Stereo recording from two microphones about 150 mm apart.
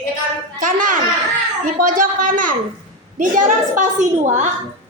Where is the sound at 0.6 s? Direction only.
60° right (ahead or behind).